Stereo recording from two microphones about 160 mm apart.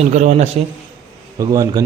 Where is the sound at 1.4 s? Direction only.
25° right (ahead or behind).